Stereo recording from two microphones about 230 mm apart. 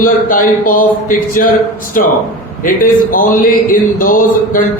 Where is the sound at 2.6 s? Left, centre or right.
Left.